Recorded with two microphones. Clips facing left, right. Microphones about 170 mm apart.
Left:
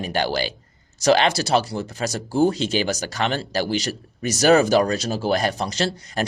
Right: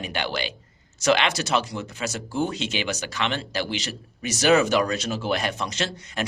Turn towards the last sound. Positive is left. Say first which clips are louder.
# left 5 dB
turn(degrees=35)  # may be behind; listen again after turning